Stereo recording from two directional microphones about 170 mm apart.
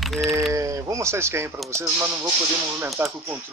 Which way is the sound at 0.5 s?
20° right (ahead or behind).